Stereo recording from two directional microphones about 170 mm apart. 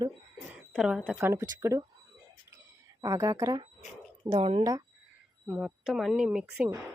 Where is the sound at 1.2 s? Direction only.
15° right (ahead or behind).